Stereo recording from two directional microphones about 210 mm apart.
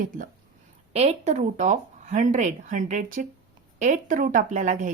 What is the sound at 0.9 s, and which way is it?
A woman's voice, 30° right (ahead or behind).